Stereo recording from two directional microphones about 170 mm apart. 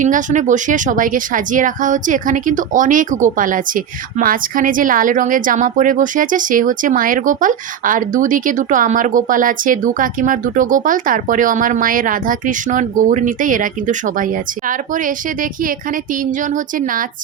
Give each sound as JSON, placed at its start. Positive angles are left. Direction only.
{"t": 0.0, "sound": "speech", "side_deg": -50}